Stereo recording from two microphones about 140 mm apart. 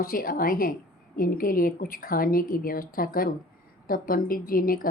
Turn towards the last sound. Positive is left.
turn(degrees=90)